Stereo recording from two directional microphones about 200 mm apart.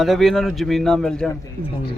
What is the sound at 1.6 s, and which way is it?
Speech, 45° right (ahead or behind).